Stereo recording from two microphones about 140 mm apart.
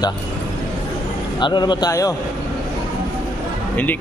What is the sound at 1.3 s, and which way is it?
Speech, 35° left (ahead or behind).